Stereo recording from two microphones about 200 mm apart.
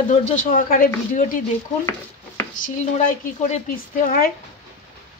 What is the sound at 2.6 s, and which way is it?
Speech, 35° left (ahead or behind).